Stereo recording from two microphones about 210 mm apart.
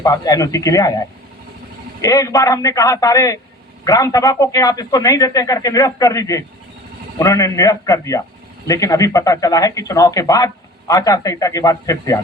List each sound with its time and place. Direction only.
0.0 s speech: 15° left (ahead or behind)